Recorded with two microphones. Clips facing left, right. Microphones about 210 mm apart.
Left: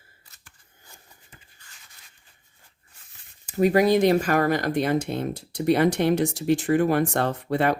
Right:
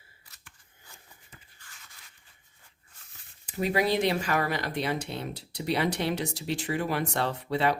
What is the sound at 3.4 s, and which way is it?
Speech, 45° left (ahead or behind).